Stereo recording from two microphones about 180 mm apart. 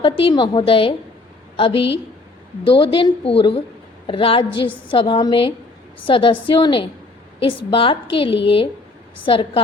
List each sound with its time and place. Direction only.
0.0 s a woman's voice: 30° left (ahead or behind)